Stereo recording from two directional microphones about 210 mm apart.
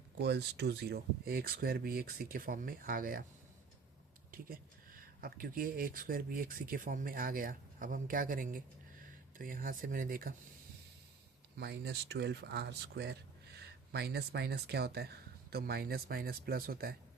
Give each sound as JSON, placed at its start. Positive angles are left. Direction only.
{"t": 0.2, "sound": "speech", "side_deg": -50}
{"t": 5.2, "sound": "speech", "side_deg": -45}
{"t": 11.5, "sound": "speech", "side_deg": -50}